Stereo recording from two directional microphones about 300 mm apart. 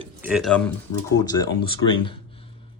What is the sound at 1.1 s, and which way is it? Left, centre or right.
Speech, centre.